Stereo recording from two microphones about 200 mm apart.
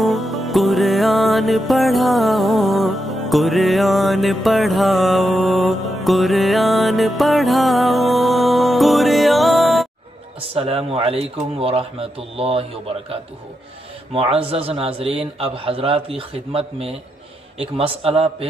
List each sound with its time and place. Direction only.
0.0 s music: centre (ahead or behind)
10.4 s a man's voice: 30° right (ahead or behind)
14.1 s a man's voice: 25° right (ahead or behind)